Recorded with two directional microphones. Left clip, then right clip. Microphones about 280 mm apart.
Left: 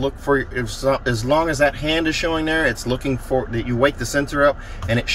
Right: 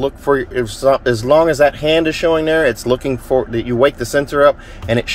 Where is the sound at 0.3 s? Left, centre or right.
Right.